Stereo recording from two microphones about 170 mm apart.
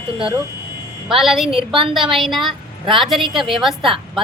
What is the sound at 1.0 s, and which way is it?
Speech, centre (ahead or behind).